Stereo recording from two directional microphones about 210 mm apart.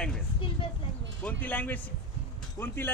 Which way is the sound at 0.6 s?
25° left (ahead or behind).